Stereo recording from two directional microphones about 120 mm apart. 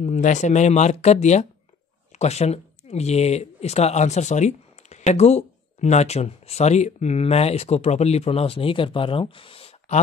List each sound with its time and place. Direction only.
0.0 s speech: 85° left; by 9.9 s 55° left (ahead or behind)